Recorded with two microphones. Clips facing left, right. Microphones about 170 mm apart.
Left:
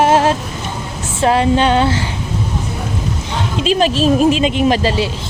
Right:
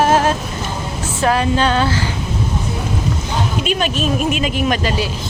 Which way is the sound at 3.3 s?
30° left (ahead or behind).